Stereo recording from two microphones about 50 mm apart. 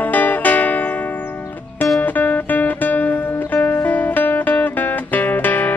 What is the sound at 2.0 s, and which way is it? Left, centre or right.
Music, left.